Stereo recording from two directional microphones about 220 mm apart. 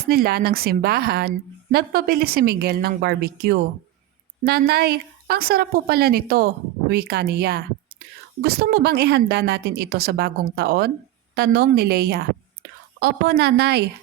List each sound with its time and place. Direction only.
0.1 s a woman's voice: 45° right (ahead or behind)